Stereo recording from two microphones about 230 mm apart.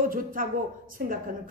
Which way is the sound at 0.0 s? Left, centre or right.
Right.